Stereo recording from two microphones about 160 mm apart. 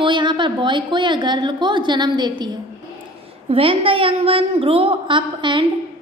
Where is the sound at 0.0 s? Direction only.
30° right (ahead or behind).